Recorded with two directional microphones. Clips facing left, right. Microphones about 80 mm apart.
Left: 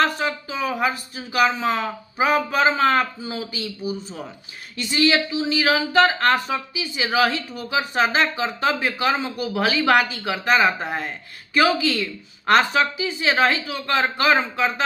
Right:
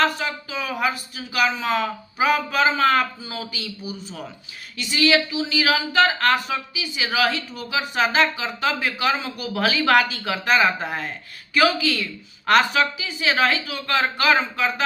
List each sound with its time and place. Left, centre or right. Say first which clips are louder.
0.0 s speech: left 1 dB; left